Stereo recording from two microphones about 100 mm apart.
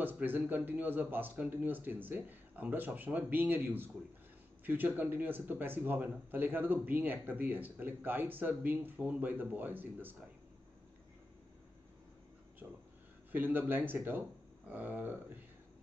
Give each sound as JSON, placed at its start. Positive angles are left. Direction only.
{"t": 0.0, "sound": "a man's voice", "side_deg": -20}
{"t": 13.3, "sound": "a man's voice", "side_deg": -20}